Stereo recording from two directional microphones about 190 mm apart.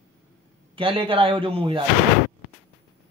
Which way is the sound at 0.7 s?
30° right (ahead or behind).